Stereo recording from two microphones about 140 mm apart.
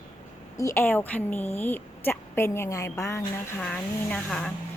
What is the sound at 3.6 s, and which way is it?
Speech, 10° left (ahead or behind).